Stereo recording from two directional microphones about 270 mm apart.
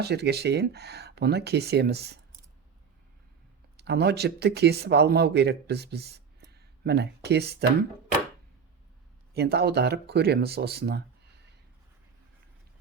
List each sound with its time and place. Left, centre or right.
0.0 s speech: right
3.8 s speech: right
9.3 s speech: right